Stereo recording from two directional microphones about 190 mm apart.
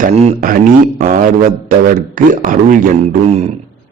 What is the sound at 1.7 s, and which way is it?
A man's voice, 45° right (ahead or behind).